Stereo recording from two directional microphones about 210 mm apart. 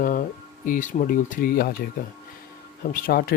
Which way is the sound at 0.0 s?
40° left (ahead or behind).